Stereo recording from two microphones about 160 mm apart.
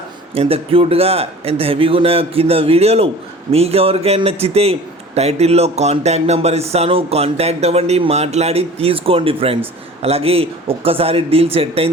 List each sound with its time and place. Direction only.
0.3 s a man's voice: 35° right (ahead or behind)